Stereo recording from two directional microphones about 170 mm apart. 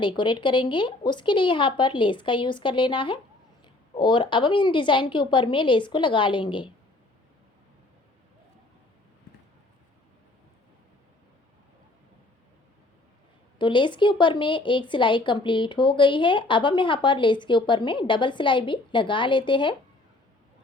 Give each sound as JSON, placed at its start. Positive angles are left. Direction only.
{"t": 0.0, "sound": "a woman's voice", "side_deg": 30}
{"t": 13.6, "sound": "a woman's voice", "side_deg": 25}